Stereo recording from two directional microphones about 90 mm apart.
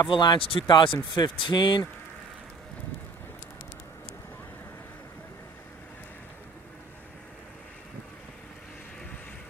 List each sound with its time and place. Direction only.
0.1 s speech: 65° left (ahead or behind)